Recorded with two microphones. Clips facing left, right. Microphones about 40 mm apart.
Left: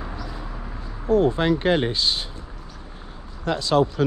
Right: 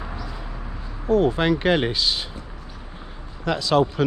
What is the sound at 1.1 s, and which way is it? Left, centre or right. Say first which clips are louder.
Speech: even; right.